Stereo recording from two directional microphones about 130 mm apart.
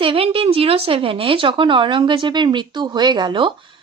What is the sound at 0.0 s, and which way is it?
A woman's voice, 45° right (ahead or behind).